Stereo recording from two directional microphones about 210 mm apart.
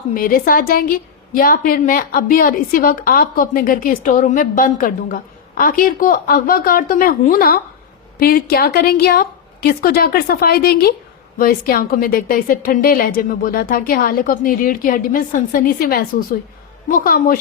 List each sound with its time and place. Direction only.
0.1 s a woman's voice: 40° left (ahead or behind)